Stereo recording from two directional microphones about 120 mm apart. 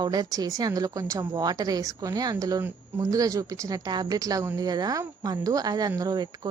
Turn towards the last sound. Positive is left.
turn(degrees=-35)  # may be behind; listen again after turning